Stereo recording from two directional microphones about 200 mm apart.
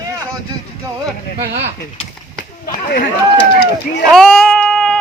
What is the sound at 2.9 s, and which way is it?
Speech, 50° left (ahead or behind).